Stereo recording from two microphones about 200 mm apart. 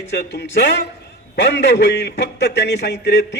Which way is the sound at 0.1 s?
60° left (ahead or behind).